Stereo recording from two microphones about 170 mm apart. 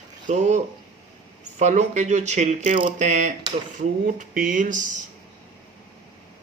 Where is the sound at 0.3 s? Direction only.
40° right (ahead or behind).